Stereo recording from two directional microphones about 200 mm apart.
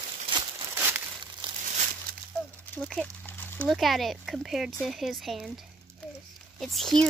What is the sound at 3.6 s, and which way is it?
Speech, centre (ahead or behind).